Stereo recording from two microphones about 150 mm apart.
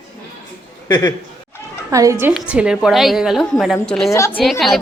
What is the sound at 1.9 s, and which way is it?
Speech, 20° right (ahead or behind).